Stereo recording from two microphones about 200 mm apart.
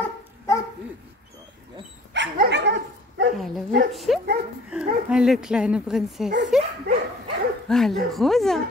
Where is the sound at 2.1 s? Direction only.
60° right (ahead or behind).